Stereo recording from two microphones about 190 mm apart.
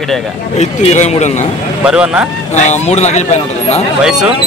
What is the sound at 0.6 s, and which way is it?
Speech, 35° left (ahead or behind).